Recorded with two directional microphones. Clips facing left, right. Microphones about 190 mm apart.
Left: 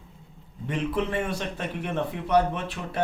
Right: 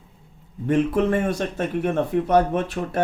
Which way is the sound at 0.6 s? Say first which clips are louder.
Right 8 dB; 45° right (ahead or behind).